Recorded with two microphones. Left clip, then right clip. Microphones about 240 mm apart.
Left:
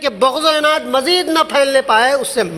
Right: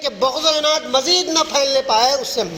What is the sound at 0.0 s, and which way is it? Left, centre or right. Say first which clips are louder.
A man's voice: left 4 dB; left.